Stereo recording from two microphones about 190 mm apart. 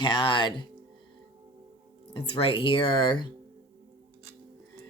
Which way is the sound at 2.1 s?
30° left (ahead or behind).